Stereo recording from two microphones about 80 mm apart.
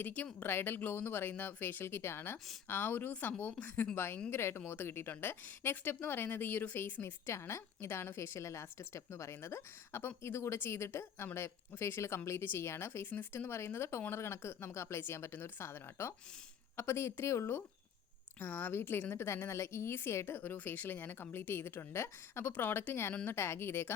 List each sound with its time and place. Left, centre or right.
0.0 s a woman's voice: left
18.3 s a woman's voice: left